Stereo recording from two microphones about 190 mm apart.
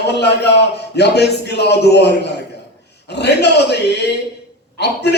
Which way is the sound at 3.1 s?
60° left (ahead or behind).